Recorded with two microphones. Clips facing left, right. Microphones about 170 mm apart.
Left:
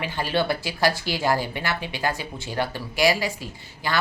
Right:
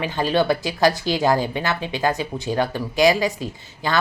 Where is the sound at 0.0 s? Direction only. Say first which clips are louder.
Right 5 dB; 20° right (ahead or behind).